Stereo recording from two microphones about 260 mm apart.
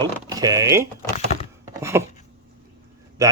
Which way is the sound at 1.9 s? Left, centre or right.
Centre.